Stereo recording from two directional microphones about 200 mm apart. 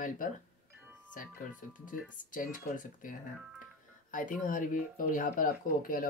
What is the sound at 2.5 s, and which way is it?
Speech, 40° left (ahead or behind).